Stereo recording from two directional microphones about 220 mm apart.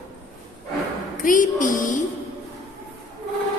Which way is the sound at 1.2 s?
35° left (ahead or behind).